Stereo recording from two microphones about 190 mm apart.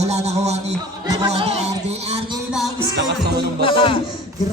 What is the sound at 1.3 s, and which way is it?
Speech, 35° right (ahead or behind).